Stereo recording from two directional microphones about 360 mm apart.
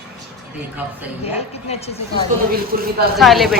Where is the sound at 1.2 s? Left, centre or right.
Centre.